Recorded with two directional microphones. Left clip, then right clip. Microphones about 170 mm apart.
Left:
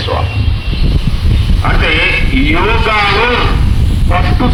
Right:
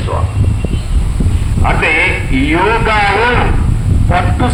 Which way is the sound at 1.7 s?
45° left (ahead or behind).